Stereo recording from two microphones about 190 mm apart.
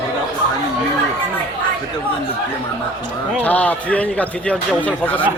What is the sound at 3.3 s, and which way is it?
A man's voice, 10° left (ahead or behind).